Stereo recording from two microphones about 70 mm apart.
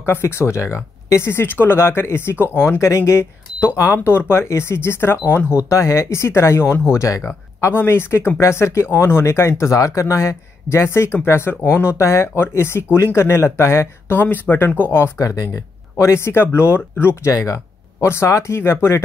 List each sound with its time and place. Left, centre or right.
0.0 s speech: left
5.6 s speech: left
15.2 s speech: left
16.0 s speech: left